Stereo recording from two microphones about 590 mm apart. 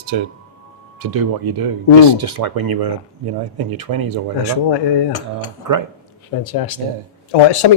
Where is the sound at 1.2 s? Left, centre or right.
Right.